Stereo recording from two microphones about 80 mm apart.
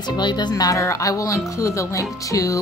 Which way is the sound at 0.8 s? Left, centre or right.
Left.